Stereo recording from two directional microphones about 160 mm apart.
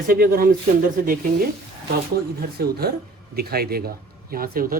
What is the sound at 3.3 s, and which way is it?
Speech, 70° right (ahead or behind).